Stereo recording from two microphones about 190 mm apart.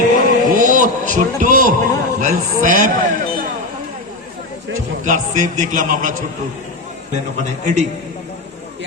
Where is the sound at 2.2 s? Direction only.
45° right (ahead or behind).